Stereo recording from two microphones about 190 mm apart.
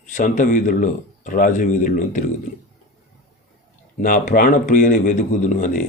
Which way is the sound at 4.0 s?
45° left (ahead or behind).